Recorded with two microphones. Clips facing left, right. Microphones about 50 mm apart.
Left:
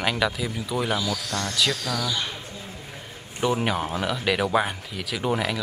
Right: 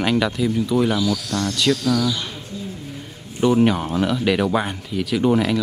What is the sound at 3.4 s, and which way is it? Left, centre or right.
Speech, centre.